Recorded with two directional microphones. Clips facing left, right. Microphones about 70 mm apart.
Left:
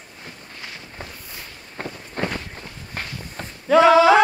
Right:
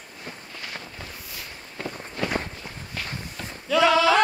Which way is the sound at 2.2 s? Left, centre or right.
Left.